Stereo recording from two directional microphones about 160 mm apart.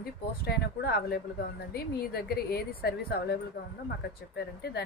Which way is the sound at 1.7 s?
75° left (ahead or behind).